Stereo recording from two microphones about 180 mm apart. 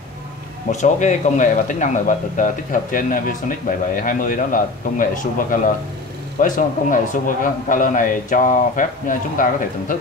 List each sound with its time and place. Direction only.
0.7 s speech: 40° left (ahead or behind)